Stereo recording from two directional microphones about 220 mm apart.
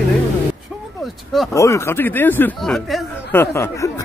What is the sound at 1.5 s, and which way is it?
Speech, 15° left (ahead or behind).